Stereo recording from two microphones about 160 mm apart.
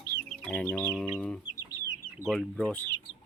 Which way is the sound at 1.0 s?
Centre (ahead or behind).